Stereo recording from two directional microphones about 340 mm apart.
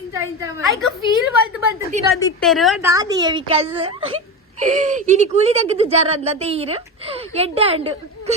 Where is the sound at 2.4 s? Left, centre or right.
Centre.